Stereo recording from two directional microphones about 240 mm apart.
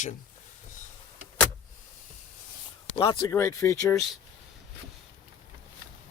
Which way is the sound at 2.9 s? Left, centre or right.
Left.